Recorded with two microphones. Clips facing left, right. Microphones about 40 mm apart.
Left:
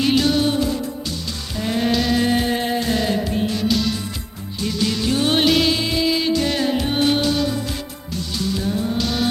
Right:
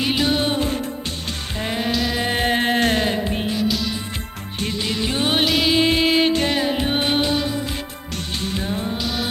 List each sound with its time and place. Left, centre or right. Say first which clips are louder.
0.0 s music: left 3 dB; centre
1.8 s music: left 4 dB; centre
2.3 s music: right 1 dB; right
2.7 s music: right 3 dB; right
3.0 s music: left 1 dB; right
3.7 s music: left 3 dB; centre
4.8 s music: left 3 dB; right
5.3 s music: left 2 dB; centre
5.7 s music: right 3 dB; right
6.5 s music: even; centre
8.4 s music: left 3 dB; right
9.0 s music: left 4 dB; centre